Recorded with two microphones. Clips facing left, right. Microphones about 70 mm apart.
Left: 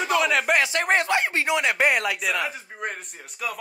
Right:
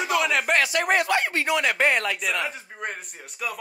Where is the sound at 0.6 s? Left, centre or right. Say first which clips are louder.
Even; left.